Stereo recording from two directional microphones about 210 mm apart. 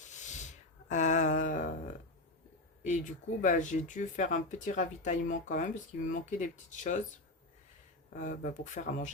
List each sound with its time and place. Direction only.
0.1 s a sound: 35° left (ahead or behind)
2.8 s speech: 35° left (ahead or behind)
8.1 s speech: 40° left (ahead or behind)